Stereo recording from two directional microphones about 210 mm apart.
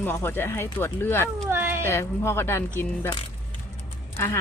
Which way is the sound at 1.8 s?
15° left (ahead or behind).